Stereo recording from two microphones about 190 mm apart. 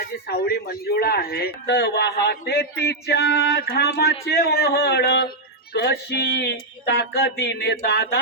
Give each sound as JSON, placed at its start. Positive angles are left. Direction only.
{"t": 0.0, "sound": "speech", "side_deg": 55}